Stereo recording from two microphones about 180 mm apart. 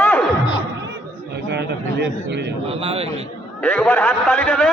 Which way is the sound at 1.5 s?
70° right (ahead or behind).